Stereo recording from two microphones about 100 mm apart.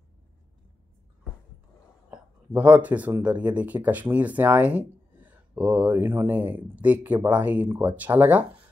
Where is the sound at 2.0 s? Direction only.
15° right (ahead or behind).